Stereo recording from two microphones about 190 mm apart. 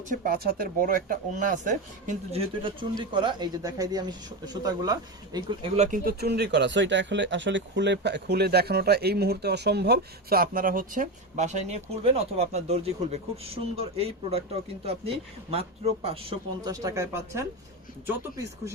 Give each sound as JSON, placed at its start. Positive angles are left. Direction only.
{"t": 0.1, "sound": "speech", "side_deg": -50}
{"t": 2.6, "sound": "speech", "side_deg": -25}
{"t": 6.1, "sound": "speech", "side_deg": -55}